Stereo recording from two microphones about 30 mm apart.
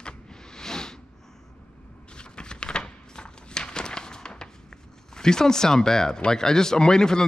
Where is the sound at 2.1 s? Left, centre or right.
Left.